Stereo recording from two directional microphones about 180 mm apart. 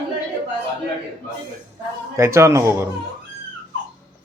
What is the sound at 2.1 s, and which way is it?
Speech, 15° right (ahead or behind).